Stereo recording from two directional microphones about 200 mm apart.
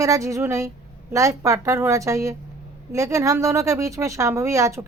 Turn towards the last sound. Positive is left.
turn(degrees=-15)  # may be behind; listen again after turning